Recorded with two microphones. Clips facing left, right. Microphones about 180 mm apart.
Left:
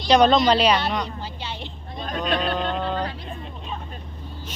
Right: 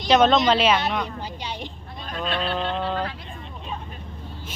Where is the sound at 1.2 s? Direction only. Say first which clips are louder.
Right 1 dB; 15° right (ahead or behind).